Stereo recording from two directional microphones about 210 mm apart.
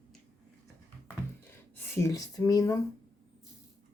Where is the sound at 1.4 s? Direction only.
10° left (ahead or behind).